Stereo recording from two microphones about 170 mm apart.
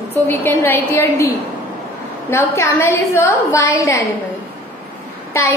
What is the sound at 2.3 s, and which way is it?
A woman's voice, 15° left (ahead or behind).